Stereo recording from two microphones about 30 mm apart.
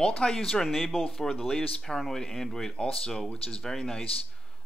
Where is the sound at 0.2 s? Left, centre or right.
Left.